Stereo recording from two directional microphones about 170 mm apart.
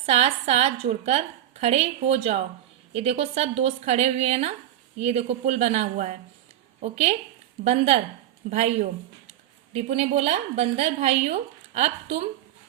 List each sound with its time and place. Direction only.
0.0 s a woman's voice: 35° right (ahead or behind)